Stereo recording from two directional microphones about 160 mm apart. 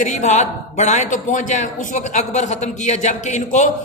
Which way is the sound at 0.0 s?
50° left (ahead or behind).